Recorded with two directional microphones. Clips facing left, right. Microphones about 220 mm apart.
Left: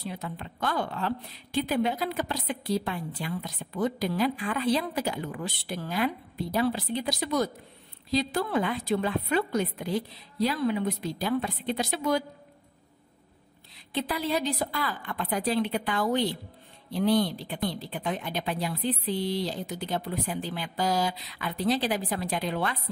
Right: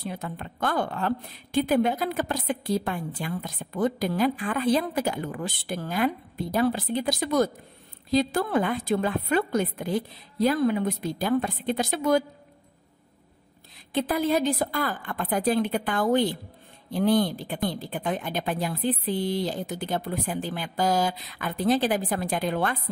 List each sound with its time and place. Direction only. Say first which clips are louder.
0.0 s a woman's voice: right 2 dB; 50° right (ahead or behind)
13.9 s a woman's voice: right 5 dB; 50° right (ahead or behind)